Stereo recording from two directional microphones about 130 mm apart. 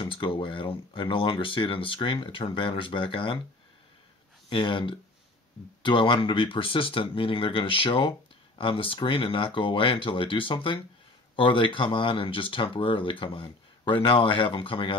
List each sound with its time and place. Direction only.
0.0 s speech: 40° left (ahead or behind)
4.5 s speech: 40° left (ahead or behind)